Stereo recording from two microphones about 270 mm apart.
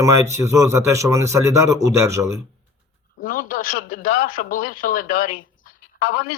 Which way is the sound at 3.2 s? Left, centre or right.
Left.